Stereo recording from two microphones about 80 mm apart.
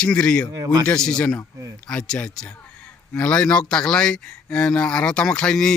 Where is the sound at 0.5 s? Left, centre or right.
Right.